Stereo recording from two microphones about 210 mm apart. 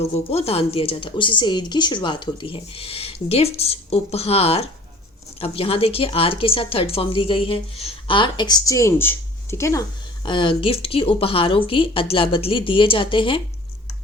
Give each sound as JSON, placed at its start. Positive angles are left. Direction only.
{"t": 0.0, "sound": "a woman's voice", "side_deg": 30}